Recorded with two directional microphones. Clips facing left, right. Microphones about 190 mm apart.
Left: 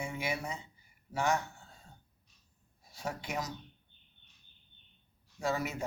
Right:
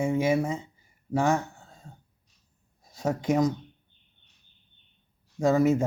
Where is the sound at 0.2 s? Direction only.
45° right (ahead or behind).